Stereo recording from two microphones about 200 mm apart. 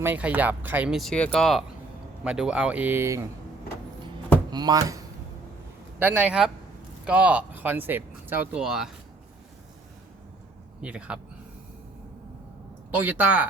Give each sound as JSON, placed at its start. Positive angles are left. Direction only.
{"t": 0.0, "sound": "speech", "side_deg": -10}
{"t": 4.5, "sound": "speech", "side_deg": -20}
{"t": 6.0, "sound": "speech", "side_deg": -5}
{"t": 10.8, "sound": "speech", "side_deg": -5}
{"t": 12.9, "sound": "speech", "side_deg": -10}